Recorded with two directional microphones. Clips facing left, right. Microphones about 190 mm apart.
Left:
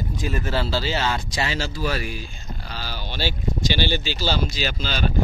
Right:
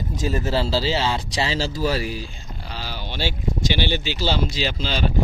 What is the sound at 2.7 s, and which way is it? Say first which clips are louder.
Speech: right 1 dB; 20° right (ahead or behind).